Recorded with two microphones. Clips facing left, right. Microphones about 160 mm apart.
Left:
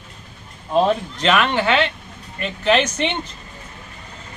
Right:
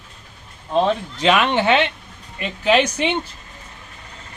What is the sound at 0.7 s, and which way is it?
Speech, 5° left (ahead or behind).